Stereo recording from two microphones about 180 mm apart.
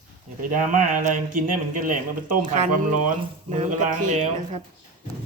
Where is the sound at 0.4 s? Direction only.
45° right (ahead or behind).